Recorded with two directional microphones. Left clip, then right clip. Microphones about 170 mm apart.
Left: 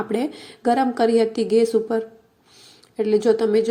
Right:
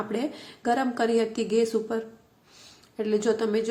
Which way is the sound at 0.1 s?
25° left (ahead or behind).